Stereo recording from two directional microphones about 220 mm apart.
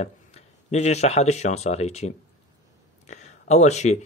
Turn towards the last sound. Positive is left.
turn(degrees=30)  # may be behind; listen again after turning